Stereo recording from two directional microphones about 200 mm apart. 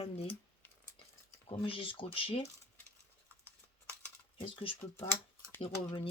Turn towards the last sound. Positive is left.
turn(degrees=25)  # may be behind; listen again after turning